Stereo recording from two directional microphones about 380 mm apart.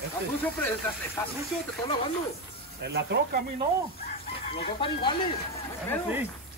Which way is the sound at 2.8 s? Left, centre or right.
Right.